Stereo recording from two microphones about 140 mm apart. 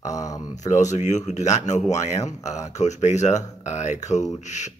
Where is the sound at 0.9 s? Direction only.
55° left (ahead or behind).